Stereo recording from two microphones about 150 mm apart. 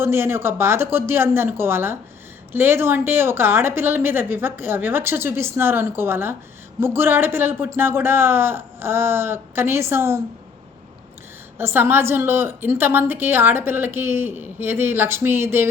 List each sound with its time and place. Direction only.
0.0 s a woman's voice: 15° right (ahead or behind)
11.5 s a woman's voice: 15° right (ahead or behind)